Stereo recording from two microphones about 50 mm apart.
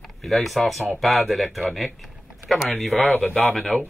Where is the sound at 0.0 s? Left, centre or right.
Centre.